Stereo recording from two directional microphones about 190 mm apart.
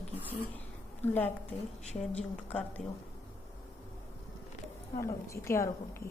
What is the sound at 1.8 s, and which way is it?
Speech, 35° left (ahead or behind).